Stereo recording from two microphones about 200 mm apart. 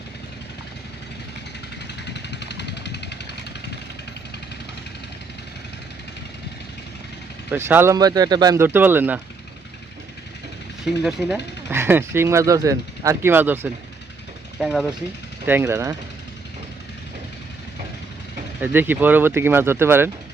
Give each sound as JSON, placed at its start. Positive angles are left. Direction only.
{"t": 2.1, "sound": "a sound", "side_deg": 60}
{"t": 7.5, "sound": "speech", "side_deg": -10}
{"t": 10.8, "sound": "speech", "side_deg": 0}
{"t": 15.4, "sound": "speech", "side_deg": -10}
{"t": 18.6, "sound": "speech", "side_deg": -10}